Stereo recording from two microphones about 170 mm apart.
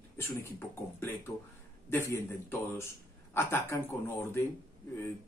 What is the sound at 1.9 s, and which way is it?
A man's voice, 15° left (ahead or behind).